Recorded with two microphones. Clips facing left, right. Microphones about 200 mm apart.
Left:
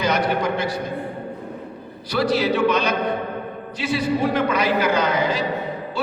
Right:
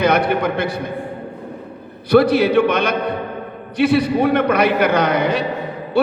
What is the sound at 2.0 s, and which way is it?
A man's voice, 60° right (ahead or behind).